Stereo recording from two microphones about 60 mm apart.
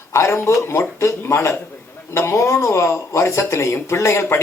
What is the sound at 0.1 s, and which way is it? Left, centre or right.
Speech, left.